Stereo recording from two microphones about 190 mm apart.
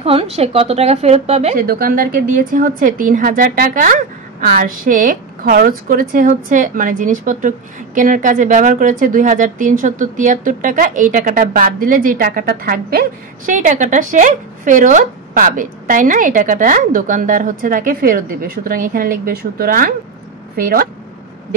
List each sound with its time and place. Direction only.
0.0 s a woman's voice: 30° right (ahead or behind)
1.6 s a woman's voice: 50° right (ahead or behind)
13.5 s a woman's voice: 40° right (ahead or behind)